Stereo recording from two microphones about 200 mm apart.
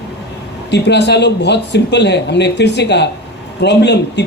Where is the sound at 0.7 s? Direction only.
60° left (ahead or behind).